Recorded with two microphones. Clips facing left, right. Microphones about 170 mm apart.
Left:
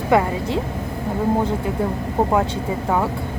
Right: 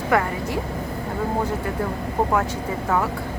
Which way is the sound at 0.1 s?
20° left (ahead or behind).